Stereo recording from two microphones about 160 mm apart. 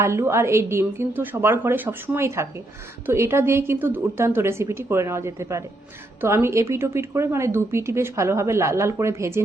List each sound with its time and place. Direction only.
0.0 s a woman's voice: 15° right (ahead or behind)